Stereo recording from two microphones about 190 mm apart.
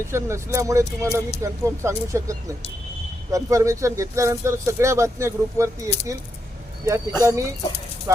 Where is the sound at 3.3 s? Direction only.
15° right (ahead or behind).